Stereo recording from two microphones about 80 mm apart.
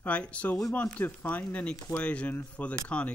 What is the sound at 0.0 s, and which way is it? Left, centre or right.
Speech, centre.